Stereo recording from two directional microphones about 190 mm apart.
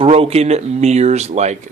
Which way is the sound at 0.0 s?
30° right (ahead or behind).